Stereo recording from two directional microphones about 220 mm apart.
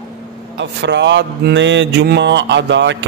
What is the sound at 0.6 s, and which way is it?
Speech, 55° right (ahead or behind).